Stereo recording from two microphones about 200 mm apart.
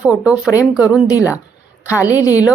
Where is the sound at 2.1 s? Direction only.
15° left (ahead or behind).